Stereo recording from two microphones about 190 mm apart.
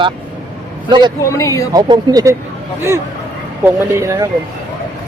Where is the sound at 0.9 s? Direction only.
25° right (ahead or behind).